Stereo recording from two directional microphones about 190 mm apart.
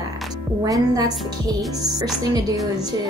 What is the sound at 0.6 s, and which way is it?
A woman's voice, 20° right (ahead or behind).